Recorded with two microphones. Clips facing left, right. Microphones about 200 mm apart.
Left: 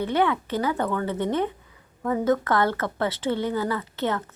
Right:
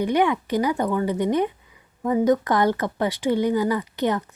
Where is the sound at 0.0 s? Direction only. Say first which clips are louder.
Right 3 dB; 15° right (ahead or behind).